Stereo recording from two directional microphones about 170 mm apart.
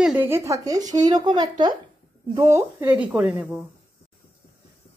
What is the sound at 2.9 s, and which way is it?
Speech, 5° right (ahead or behind).